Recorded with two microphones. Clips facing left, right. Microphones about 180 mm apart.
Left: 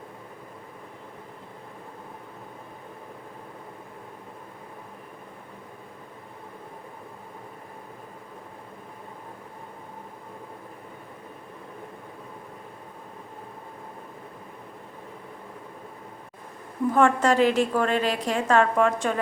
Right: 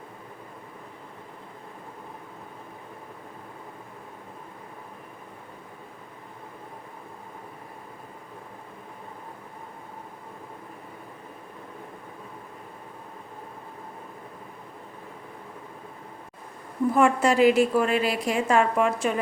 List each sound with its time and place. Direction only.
16.9 s a woman's voice: 10° right (ahead or behind)